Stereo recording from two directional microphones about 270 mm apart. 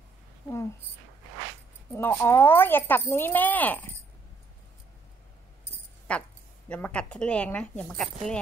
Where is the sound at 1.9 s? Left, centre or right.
Centre.